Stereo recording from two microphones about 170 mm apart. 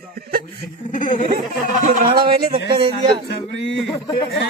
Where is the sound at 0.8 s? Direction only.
50° left (ahead or behind).